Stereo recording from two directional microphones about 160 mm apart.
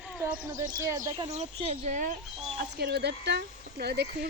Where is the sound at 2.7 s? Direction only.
90° right.